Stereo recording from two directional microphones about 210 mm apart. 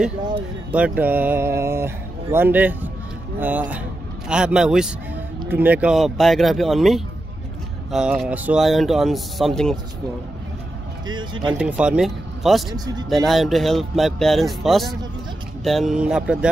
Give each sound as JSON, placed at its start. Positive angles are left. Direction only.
{"t": 0.7, "sound": "speech", "side_deg": -5}
{"t": 11.1, "sound": "speech", "side_deg": -20}
{"t": 11.5, "sound": "speech", "side_deg": -5}
{"t": 12.7, "sound": "speech", "side_deg": -20}
{"t": 13.1, "sound": "speech", "side_deg": 0}